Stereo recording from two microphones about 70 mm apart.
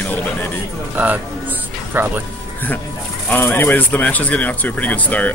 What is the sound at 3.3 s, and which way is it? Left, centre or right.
Speech, left.